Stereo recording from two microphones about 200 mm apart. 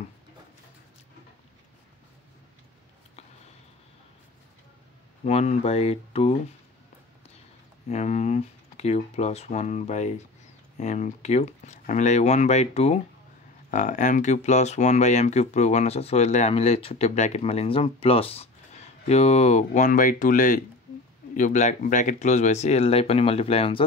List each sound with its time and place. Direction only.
5.2 s speech: 35° left (ahead or behind)
7.9 s speech: 35° left (ahead or behind)